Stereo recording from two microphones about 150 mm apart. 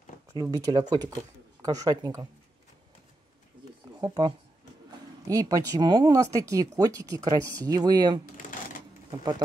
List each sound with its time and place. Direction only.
0.3 s speech: 25° right (ahead or behind)
4.0 s speech: 25° right (ahead or behind)
5.3 s speech: 25° right (ahead or behind)
8.4 s shuffling cards: 65° left (ahead or behind)